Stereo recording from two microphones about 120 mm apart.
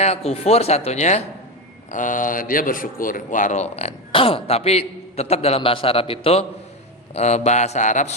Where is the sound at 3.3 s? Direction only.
85° left; by 6.5 s 55° left (ahead or behind).